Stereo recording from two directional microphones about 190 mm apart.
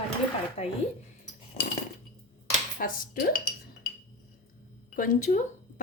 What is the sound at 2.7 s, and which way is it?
Speech, 50° left (ahead or behind).